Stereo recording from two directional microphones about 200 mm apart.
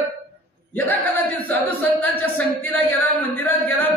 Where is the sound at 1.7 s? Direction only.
10° left (ahead or behind).